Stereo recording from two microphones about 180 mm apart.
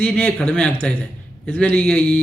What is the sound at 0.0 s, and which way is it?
A man's voice, 10° left (ahead or behind).